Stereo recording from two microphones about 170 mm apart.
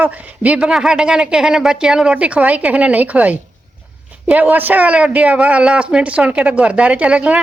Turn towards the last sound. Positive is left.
turn(degrees=-5)  # may be behind; listen again after turning